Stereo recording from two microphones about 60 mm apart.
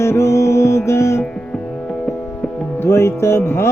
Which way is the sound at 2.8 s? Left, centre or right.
Left.